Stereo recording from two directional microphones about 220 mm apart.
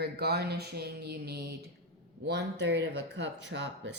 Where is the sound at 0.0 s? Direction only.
45° right (ahead or behind).